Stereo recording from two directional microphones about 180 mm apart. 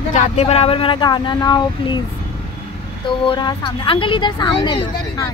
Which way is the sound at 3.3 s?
25° left (ahead or behind).